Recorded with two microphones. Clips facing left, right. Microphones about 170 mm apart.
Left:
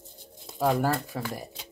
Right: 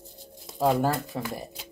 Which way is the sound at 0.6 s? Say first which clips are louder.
Right 1 dB; 20° right (ahead or behind).